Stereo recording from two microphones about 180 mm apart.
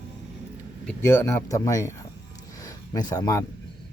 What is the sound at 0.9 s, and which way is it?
Speech, 10° left (ahead or behind).